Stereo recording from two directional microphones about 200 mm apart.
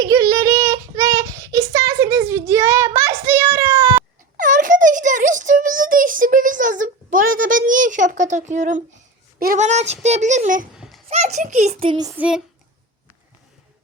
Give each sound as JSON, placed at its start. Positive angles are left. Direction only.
{"t": 0.0, "sound": "child singing", "side_deg": -20}
{"t": 4.4, "sound": "a sound", "side_deg": -40}
{"t": 9.4, "sound": "a child's voice", "side_deg": -40}
{"t": 10.8, "sound": "a sound", "side_deg": 0}
{"t": 11.1, "sound": "a child's voice", "side_deg": -35}
{"t": 12.1, "sound": "child singing", "side_deg": -5}